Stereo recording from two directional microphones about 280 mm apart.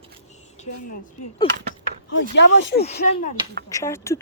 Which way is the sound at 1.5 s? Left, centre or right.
Centre.